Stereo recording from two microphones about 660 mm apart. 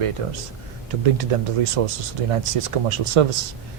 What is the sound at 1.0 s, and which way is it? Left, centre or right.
Speech, right.